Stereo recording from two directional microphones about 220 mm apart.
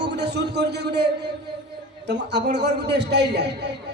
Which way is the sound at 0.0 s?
50° right (ahead or behind).